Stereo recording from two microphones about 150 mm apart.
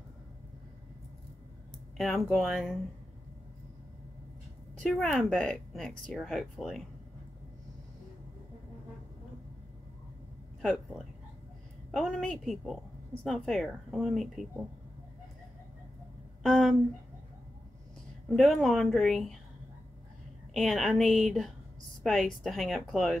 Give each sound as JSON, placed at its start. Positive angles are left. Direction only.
{"t": 2.0, "sound": "speech", "side_deg": 0}
{"t": 4.7, "sound": "speech", "side_deg": 5}
{"t": 10.6, "sound": "speech", "side_deg": 0}
{"t": 16.4, "sound": "speech", "side_deg": 0}
{"t": 18.3, "sound": "speech", "side_deg": 0}
{"t": 20.5, "sound": "speech", "side_deg": 0}